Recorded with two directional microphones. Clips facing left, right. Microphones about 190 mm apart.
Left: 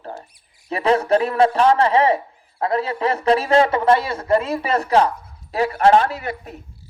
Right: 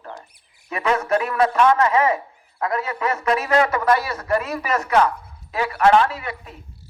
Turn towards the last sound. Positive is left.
turn(degrees=40)  # may be behind; listen again after turning